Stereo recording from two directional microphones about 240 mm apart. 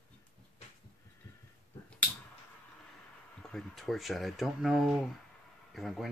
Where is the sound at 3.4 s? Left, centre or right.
Centre.